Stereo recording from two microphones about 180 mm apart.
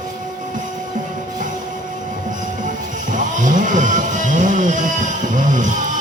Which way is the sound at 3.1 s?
45° right (ahead or behind).